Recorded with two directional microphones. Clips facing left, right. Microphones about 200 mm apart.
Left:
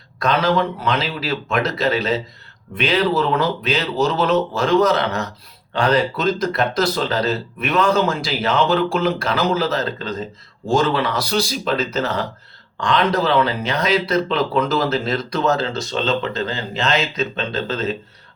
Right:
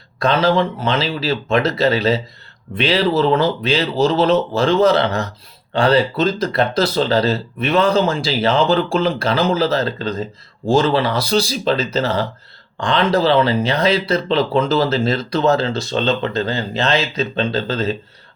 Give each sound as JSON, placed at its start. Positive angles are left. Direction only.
{"t": 0.2, "sound": "a man's voice", "side_deg": -30}